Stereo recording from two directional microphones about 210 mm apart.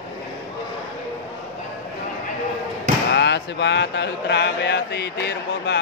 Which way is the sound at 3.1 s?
55° left (ahead or behind).